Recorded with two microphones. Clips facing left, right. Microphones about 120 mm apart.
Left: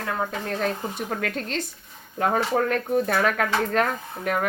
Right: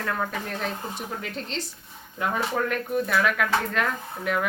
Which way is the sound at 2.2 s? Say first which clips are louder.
Left 4 dB; 40° left (ahead or behind).